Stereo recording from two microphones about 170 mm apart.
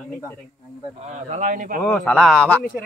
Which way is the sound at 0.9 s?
45° right (ahead or behind).